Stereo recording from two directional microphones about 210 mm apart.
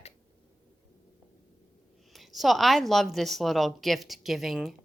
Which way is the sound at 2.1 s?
Centre (ahead or behind).